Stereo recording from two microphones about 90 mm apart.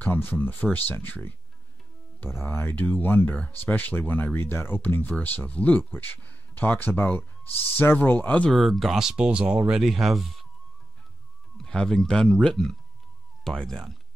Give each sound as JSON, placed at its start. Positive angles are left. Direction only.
{"t": 0.0, "sound": "speech", "side_deg": 20}
{"t": 8.5, "sound": "speech", "side_deg": 0}
{"t": 11.5, "sound": "speech", "side_deg": 5}